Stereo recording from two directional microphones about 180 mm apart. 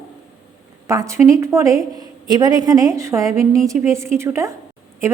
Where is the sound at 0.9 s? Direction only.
15° right (ahead or behind).